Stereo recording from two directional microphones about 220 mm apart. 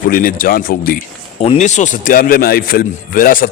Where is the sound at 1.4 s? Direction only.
30° left (ahead or behind).